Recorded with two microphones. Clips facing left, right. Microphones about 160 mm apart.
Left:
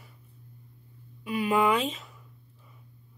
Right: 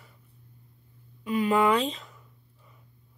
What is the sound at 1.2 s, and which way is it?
Speech, 10° left (ahead or behind).